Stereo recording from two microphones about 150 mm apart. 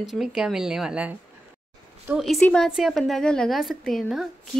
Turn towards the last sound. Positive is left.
turn(degrees=0)  # may be behind; listen again after turning